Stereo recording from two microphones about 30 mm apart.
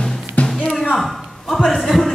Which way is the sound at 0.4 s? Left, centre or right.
Left.